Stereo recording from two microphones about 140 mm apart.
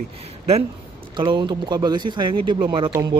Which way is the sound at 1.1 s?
35° right (ahead or behind).